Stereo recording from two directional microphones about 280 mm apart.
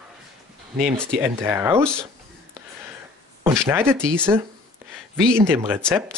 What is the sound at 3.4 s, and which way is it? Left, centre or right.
Speech, centre.